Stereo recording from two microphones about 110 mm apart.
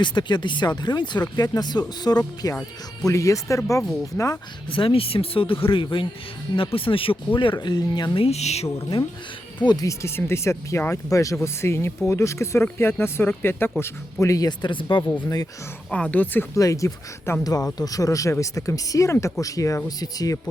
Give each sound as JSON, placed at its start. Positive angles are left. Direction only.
{"t": 0.0, "sound": "speech", "side_deg": 45}
{"t": 4.7, "sound": "speech", "side_deg": 55}
{"t": 8.3, "sound": "speech", "side_deg": 80}
{"t": 8.6, "sound": "speech", "side_deg": 30}
{"t": 15.0, "sound": "a woman's voice", "side_deg": 15}
{"t": 16.6, "sound": "speech", "side_deg": 30}